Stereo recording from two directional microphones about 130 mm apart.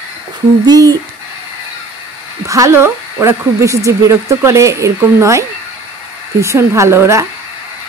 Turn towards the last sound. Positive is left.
turn(degrees=-20)  # may be behind; listen again after turning